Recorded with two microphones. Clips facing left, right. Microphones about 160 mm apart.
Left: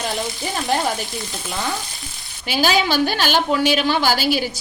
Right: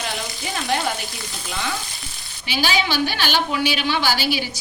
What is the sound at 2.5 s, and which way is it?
A woman's voice, 45° left (ahead or behind).